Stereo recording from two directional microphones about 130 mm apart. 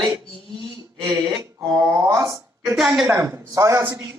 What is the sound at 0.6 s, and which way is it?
Speech, 25° right (ahead or behind).